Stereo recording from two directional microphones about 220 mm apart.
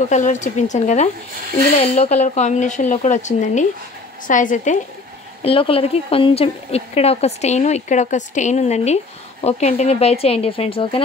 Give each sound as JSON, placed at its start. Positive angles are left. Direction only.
{"t": 0.1, "sound": "speech", "side_deg": 35}
{"t": 5.4, "sound": "speech", "side_deg": 25}